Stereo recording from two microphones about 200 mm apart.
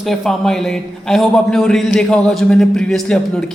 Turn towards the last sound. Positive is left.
turn(degrees=5)  # may be behind; listen again after turning